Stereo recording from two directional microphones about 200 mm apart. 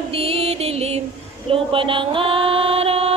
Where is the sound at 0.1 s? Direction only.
30° right (ahead or behind).